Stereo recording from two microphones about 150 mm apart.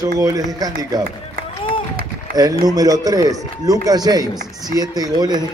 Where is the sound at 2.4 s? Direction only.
25° right (ahead or behind).